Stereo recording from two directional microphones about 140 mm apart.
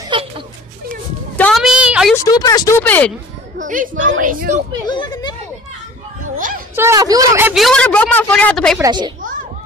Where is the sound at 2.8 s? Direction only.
10° left (ahead or behind).